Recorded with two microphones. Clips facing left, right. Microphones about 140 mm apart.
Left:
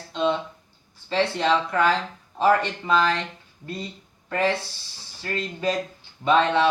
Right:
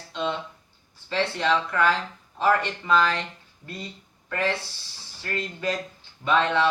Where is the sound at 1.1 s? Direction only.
25° left (ahead or behind).